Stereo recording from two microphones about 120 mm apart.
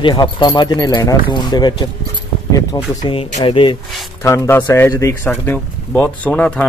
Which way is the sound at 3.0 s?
45° left (ahead or behind).